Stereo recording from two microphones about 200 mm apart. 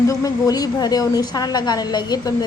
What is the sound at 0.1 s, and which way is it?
A woman's voice, 15° left (ahead or behind).